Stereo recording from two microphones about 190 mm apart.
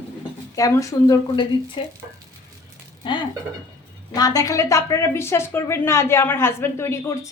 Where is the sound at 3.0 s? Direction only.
25° left (ahead or behind).